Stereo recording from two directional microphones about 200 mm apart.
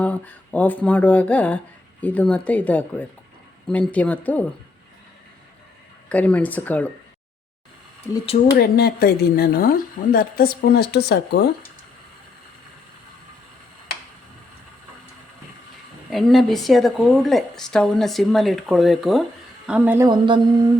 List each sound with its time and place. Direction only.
0.0 s speech: 5° left (ahead or behind)
6.1 s speech: 5° left (ahead or behind)
8.5 s speech: 50° left (ahead or behind)
16.0 s a woman's voice: centre (ahead or behind)
20.1 s speech: 20° right (ahead or behind)